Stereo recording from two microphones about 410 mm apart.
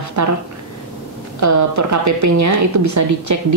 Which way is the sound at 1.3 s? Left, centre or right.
Right.